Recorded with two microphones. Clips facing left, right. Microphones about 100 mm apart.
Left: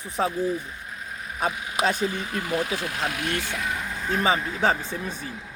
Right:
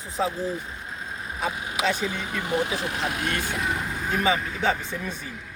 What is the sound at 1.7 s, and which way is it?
Speech, 45° left (ahead or behind).